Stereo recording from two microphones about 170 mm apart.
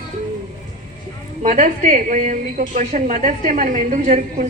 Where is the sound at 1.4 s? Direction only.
45° right (ahead or behind).